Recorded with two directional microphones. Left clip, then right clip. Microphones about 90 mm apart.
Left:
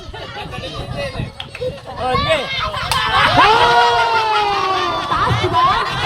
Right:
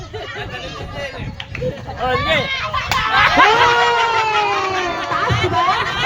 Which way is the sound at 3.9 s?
30° right (ahead or behind).